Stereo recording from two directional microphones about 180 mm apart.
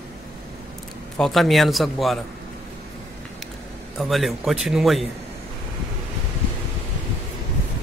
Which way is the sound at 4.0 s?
Centre (ahead or behind).